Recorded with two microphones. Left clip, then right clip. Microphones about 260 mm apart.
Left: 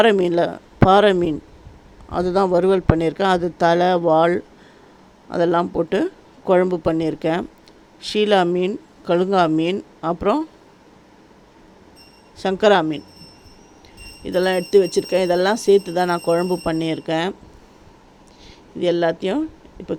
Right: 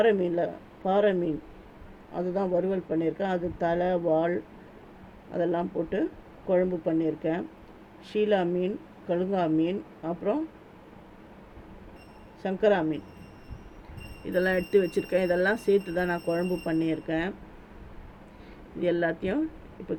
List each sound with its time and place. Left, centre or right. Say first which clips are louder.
0.0 s speech: left 8 dB; left
12.4 s speech: left 9 dB; left
14.3 s speech: left 7 dB; left
18.8 s speech: left 8 dB; left